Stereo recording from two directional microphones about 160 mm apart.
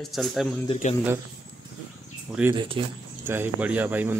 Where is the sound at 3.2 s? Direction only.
15° right (ahead or behind).